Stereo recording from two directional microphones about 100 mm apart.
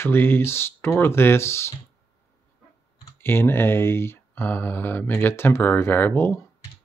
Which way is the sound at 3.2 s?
20° left (ahead or behind).